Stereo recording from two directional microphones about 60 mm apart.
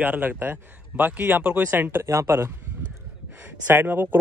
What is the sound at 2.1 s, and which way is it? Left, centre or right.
Speech, right.